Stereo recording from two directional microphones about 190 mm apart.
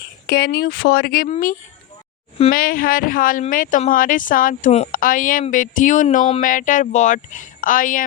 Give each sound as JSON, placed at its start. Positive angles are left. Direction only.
{"t": 0.3, "sound": "speech", "side_deg": 55}